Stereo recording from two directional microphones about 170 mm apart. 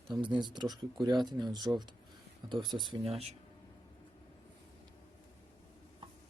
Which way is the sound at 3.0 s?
35° right (ahead or behind).